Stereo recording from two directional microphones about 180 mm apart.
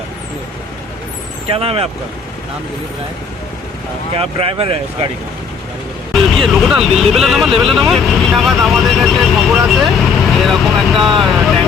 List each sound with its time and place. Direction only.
1.5 s speech: 30° right (ahead or behind)
4.2 s speech: 30° right (ahead or behind)
6.1 s speech: centre (ahead or behind)